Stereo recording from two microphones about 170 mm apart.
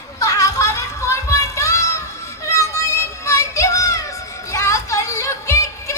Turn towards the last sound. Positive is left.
turn(degrees=15)  # may be behind; listen again after turning